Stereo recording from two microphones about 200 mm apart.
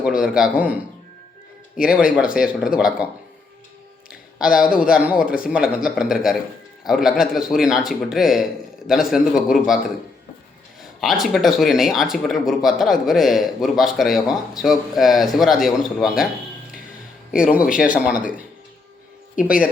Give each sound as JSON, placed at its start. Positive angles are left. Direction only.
{"t": 0.0, "sound": "a man's voice", "side_deg": -5}
{"t": 4.1, "sound": "speech", "side_deg": -5}
{"t": 11.0, "sound": "speech", "side_deg": 0}
{"t": 17.8, "sound": "speech", "side_deg": 45}